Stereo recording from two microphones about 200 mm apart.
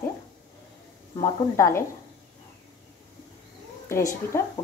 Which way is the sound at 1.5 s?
15° left (ahead or behind).